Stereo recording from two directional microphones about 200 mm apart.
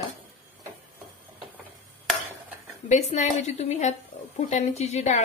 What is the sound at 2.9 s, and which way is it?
A woman's voice, 35° left (ahead or behind).